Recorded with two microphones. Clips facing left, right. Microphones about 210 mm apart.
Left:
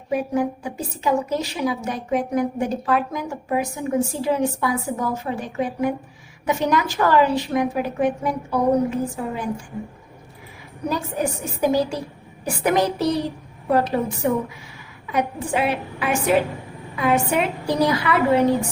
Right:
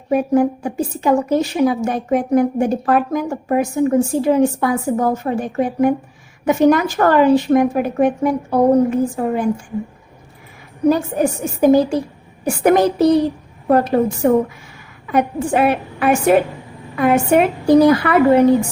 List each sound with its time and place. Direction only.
0.1 s a woman's voice: 50° right (ahead or behind)
10.8 s a woman's voice: 50° right (ahead or behind)